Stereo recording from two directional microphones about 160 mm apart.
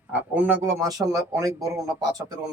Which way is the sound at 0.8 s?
20° right (ahead or behind).